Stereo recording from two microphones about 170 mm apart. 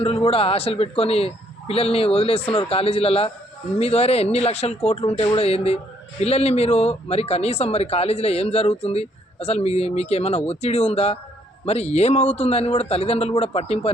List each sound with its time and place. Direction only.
0.0 s speech: 35° left (ahead or behind)